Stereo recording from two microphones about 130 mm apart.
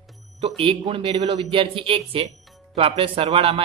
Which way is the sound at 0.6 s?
45° right (ahead or behind).